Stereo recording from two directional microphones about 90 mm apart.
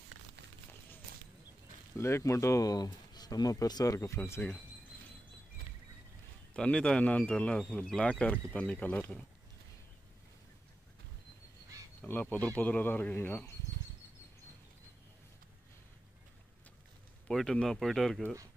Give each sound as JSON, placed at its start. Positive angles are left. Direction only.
{"t": 2.0, "sound": "speech", "side_deg": 30}
{"t": 6.5, "sound": "speech", "side_deg": 10}
{"t": 12.1, "sound": "speech", "side_deg": 20}
{"t": 17.3, "sound": "speech", "side_deg": 5}